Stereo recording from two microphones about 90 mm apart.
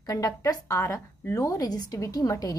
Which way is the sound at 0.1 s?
40° left (ahead or behind).